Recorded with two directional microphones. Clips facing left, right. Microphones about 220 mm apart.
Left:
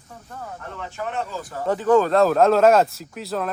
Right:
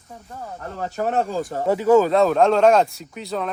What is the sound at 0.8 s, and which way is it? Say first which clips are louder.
Speech: right 7 dB; 40° right (ahead or behind).